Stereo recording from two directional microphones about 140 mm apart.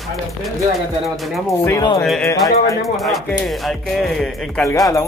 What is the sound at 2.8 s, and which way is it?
Speech, centre (ahead or behind).